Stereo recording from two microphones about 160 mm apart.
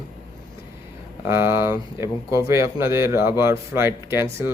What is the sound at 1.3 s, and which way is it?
Speech, 15° right (ahead or behind).